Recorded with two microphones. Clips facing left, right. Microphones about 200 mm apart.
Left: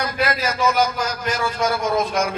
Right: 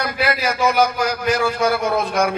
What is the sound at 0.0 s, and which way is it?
A man's voice, 65° right (ahead or behind).